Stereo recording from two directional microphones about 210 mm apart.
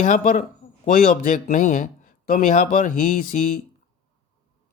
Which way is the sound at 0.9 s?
40° left (ahead or behind).